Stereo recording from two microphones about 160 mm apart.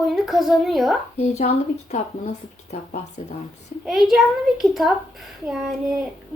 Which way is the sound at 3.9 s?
5° right (ahead or behind).